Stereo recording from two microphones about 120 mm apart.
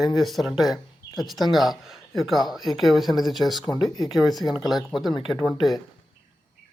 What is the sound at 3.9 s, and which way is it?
Speech, 30° left (ahead or behind).